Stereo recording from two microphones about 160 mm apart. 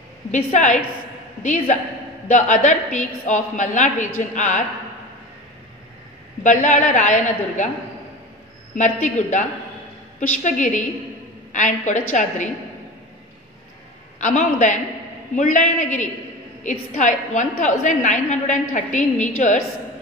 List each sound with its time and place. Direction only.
0.3 s a woman's voice: 50° left (ahead or behind)
6.4 s a woman's voice: 50° left (ahead or behind)
8.7 s a woman's voice: 50° left (ahead or behind)
14.2 s a woman's voice: 50° left (ahead or behind)